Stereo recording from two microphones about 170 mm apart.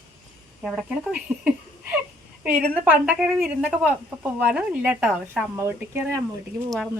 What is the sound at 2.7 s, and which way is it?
A woman's voice, 10° right (ahead or behind).